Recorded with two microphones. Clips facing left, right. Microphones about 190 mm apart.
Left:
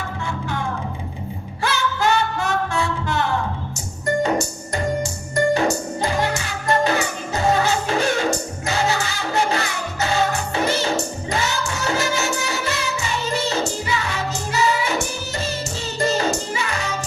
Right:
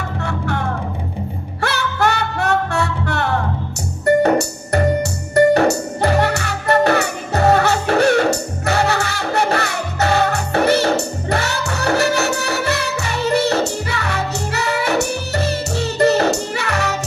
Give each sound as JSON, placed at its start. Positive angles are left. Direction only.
{"t": 0.2, "sound": "music", "side_deg": -65}
{"t": 1.6, "sound": "music", "side_deg": -65}